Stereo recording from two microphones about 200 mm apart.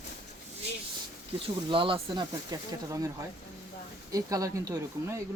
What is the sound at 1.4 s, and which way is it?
Speech, 25° right (ahead or behind).